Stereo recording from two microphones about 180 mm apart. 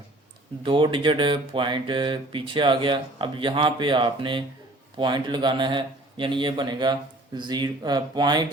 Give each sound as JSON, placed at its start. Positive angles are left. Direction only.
{"t": 0.6, "sound": "speech", "side_deg": -30}